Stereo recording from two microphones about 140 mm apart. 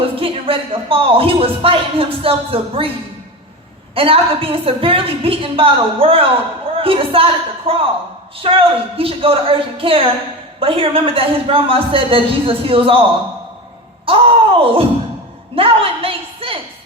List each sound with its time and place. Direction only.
0.2 s speech: 40° right (ahead or behind)
3.9 s a woman's voice: 40° right (ahead or behind)